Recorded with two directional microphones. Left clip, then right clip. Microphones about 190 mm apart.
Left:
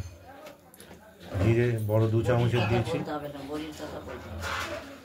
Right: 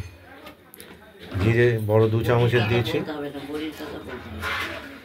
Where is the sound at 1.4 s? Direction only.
10° right (ahead or behind).